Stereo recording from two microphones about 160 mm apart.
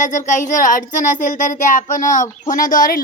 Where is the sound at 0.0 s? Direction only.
50° left (ahead or behind).